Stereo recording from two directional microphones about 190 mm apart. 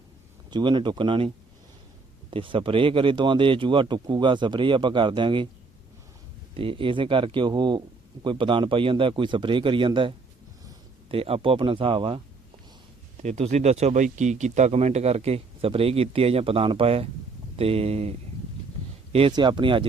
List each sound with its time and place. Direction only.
0.5 s a man's voice: 25° right (ahead or behind)
2.3 s a man's voice: 25° right (ahead or behind)
6.5 s a man's voice: 30° right (ahead or behind)
13.2 s speech: 35° right (ahead or behind)
19.1 s a man's voice: 25° right (ahead or behind)